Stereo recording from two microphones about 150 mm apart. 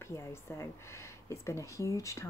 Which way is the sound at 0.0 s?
15° left (ahead or behind).